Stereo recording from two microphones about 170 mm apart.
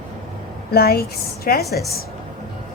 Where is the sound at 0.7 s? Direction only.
65° left (ahead or behind).